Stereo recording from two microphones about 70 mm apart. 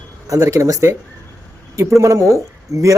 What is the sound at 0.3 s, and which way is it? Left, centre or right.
Speech, right.